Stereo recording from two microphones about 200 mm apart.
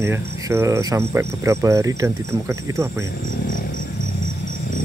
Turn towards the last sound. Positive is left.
turn(degrees=-15)  # may be behind; listen again after turning